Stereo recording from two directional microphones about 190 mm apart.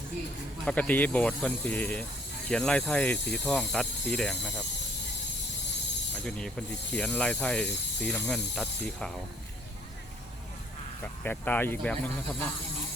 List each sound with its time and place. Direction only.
0.6 s speech: 5° left (ahead or behind)
6.2 s speech: 5° left (ahead or behind)
11.0 s speech: 10° left (ahead or behind)